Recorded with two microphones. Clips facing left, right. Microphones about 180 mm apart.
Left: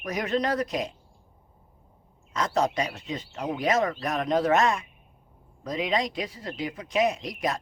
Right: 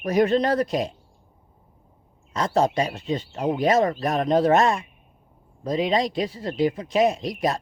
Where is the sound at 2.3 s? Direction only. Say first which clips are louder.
Right 4 dB; 30° right (ahead or behind).